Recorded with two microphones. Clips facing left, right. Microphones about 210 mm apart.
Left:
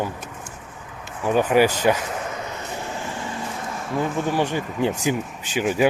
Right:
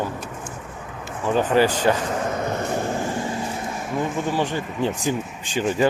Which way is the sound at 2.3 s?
50° right (ahead or behind).